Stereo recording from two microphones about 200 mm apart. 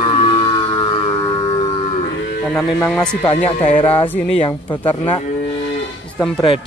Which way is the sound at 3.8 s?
25° left (ahead or behind).